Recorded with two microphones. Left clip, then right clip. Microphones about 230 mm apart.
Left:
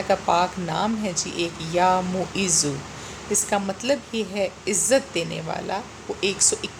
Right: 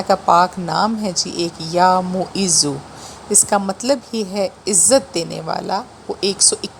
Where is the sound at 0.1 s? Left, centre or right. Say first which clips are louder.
Right 7 dB; right.